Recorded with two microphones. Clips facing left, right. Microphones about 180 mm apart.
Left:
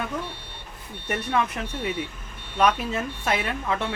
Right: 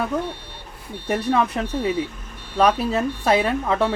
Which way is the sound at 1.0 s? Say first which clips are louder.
Right 6 dB; 30° right (ahead or behind).